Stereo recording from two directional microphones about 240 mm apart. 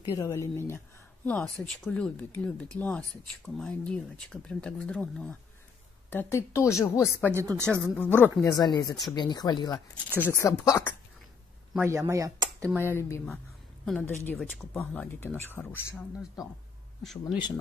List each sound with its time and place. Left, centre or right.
0.0 s speech: centre
7.2 s speech: centre
7.9 s speech: centre
11.7 s speech: centre
12.8 s speech: centre